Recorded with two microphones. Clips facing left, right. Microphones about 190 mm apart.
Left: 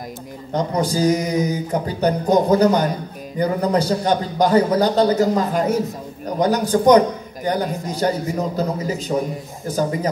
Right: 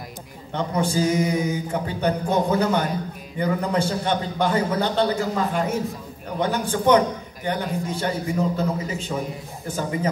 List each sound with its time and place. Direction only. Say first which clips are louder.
0.5 s a man's voice: left 3 dB; 40° left (ahead or behind)